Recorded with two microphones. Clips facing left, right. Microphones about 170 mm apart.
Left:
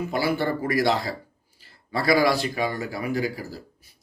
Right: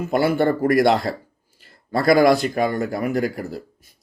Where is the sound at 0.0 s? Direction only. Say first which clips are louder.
Right 6 dB; 50° right (ahead or behind).